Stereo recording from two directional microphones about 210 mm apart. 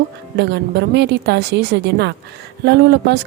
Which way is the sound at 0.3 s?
55° right (ahead or behind).